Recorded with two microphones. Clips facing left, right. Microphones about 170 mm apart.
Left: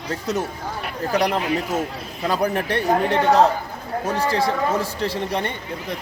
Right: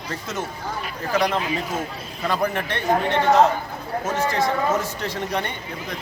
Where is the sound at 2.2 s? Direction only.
35° left (ahead or behind).